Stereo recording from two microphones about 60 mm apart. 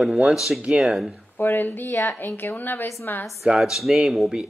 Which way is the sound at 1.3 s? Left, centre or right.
Left.